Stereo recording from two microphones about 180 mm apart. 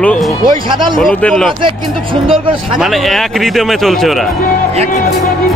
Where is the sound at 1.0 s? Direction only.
5° left (ahead or behind).